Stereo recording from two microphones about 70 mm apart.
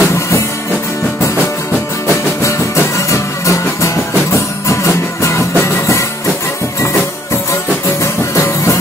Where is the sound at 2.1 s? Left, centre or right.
Left.